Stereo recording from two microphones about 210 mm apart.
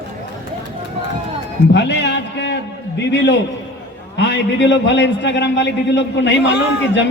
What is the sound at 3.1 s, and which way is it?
A man's voice, 55° left (ahead or behind).